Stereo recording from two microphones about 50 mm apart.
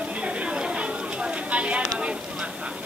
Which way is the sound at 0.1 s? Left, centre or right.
Right.